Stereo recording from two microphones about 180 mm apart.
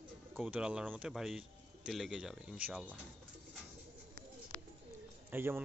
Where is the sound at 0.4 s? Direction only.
5° right (ahead or behind).